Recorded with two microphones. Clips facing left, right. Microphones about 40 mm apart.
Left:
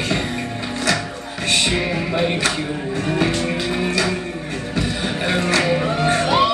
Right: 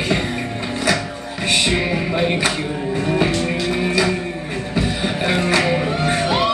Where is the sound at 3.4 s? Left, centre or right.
Centre.